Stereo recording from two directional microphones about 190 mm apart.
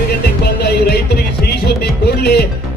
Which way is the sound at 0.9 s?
60° left (ahead or behind).